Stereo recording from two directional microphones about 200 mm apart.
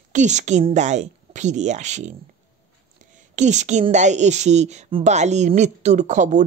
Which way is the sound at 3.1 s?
40° right (ahead or behind).